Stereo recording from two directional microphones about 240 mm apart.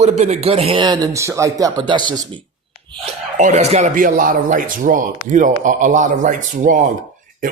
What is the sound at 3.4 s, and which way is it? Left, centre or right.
Speech, right.